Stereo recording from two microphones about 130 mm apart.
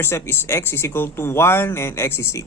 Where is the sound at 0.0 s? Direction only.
20° left (ahead or behind).